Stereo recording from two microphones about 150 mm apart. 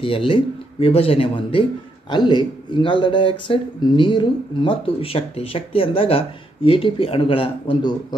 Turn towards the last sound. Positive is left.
turn(degrees=30)  # may be behind; listen again after turning